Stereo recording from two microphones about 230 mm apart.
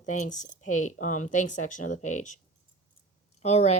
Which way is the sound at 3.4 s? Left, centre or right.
Left.